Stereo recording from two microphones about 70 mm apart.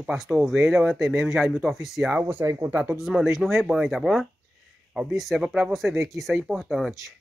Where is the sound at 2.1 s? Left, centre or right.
Right.